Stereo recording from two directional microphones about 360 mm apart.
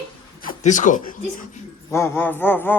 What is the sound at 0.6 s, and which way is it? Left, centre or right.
Speech, left.